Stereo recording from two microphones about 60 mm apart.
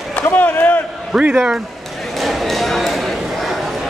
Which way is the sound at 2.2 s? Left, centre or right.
Centre.